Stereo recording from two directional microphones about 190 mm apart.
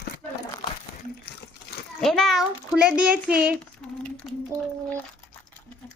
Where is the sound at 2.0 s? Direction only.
Centre (ahead or behind).